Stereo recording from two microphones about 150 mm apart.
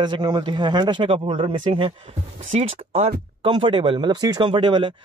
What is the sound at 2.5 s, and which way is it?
Speech, 60° right (ahead or behind).